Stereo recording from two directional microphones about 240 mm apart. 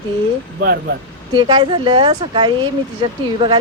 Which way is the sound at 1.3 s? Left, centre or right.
Centre.